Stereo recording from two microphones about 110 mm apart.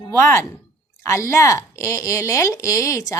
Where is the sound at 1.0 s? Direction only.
25° left (ahead or behind).